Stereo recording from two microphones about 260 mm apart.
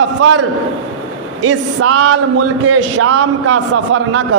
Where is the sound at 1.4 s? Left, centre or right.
Right.